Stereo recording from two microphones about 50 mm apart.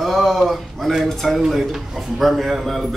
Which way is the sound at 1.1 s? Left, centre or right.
Centre.